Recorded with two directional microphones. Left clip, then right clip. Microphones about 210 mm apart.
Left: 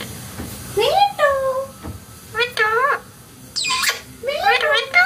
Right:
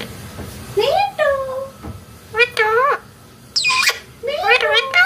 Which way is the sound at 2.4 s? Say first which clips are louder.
Right 3 dB; 25° right (ahead or behind).